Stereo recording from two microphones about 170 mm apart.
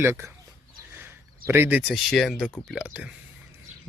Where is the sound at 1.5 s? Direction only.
10° right (ahead or behind).